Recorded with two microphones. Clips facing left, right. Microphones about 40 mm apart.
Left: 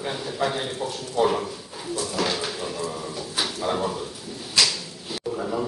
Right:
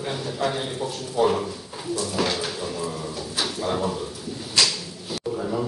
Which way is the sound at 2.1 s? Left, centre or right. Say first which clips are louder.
Even; centre.